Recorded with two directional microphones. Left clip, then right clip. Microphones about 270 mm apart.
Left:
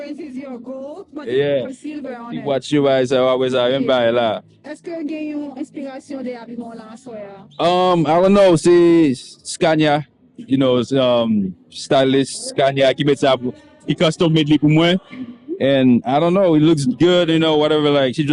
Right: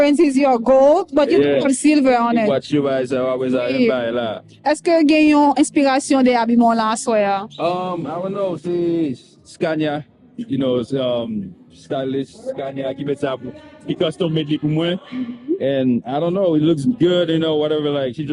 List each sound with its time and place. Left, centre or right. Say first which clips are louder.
0.3 s speech: right 18 dB; right
2.5 s a man's voice: left 2 dB; left
4.6 s speech: right 13 dB; right
7.6 s speech: left 11 dB; left
8.6 s speech: left 8 dB; left
9.6 s speech: left 5 dB; left
11.9 s a man's voice: left 8 dB; left
13.1 s speech: left 7 dB; left